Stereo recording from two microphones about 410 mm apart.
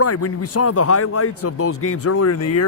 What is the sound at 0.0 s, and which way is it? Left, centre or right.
A man's voice, left.